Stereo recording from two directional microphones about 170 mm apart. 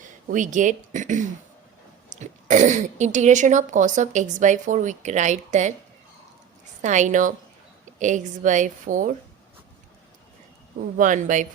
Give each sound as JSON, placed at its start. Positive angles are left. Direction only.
{"t": 0.0, "sound": "speech", "side_deg": -50}
{"t": 6.8, "sound": "speech", "side_deg": -45}
{"t": 10.9, "sound": "speech", "side_deg": -50}